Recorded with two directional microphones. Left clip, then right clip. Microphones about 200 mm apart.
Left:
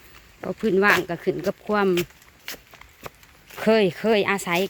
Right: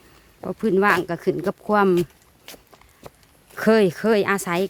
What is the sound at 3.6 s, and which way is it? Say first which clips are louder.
Speech: right 2 dB; 25° right (ahead or behind).